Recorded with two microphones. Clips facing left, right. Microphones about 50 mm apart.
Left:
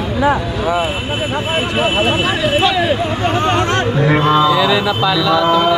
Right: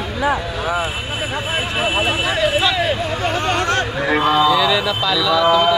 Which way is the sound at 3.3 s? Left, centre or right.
Left.